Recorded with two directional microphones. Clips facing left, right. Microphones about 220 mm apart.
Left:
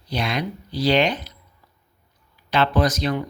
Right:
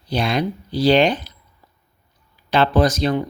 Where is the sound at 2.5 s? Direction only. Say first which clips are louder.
Right 3 dB; 30° right (ahead or behind).